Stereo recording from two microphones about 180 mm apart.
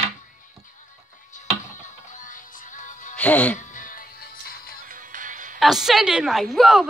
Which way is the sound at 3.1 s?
5° left (ahead or behind).